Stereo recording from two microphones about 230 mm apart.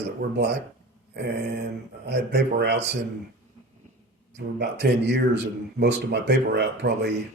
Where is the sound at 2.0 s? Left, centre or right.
Right.